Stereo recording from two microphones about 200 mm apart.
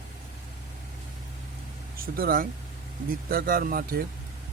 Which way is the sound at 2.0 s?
45° right (ahead or behind).